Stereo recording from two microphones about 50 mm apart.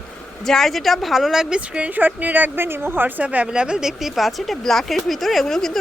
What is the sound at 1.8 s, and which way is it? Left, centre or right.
A woman's voice, right.